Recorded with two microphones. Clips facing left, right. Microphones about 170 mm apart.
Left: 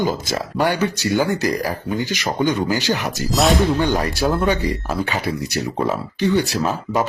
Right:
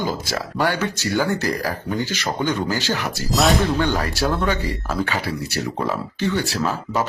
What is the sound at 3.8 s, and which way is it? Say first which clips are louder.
Speech: left 2 dB; 15° left (ahead or behind).